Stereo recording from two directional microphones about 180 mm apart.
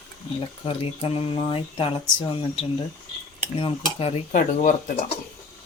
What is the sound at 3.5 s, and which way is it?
Cutlery, 30° left (ahead or behind).